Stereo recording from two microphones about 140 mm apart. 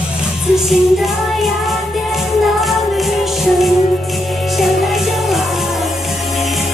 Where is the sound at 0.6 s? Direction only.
Centre (ahead or behind).